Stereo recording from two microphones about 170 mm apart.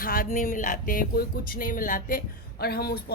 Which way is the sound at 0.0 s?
60° left (ahead or behind).